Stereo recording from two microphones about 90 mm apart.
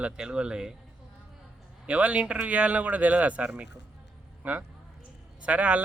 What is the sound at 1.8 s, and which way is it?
A man's voice, 15° right (ahead or behind).